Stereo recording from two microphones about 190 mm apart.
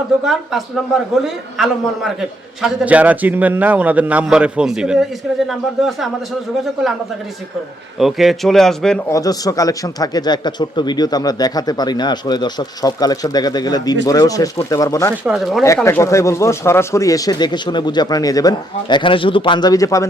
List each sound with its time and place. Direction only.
1.1 s a man's voice: centre (ahead or behind)
9.0 s speech: 15° left (ahead or behind)
15.1 s a man's voice: 5° right (ahead or behind)
15.6 s speech: 15° left (ahead or behind)